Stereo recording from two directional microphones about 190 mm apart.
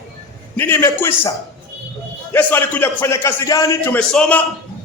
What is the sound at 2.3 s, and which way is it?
A man's voice, 10° left (ahead or behind).